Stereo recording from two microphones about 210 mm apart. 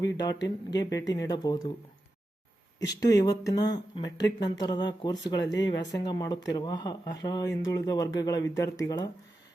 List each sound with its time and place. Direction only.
0.0 s speech: 20° left (ahead or behind)
2.9 s speech: 15° left (ahead or behind)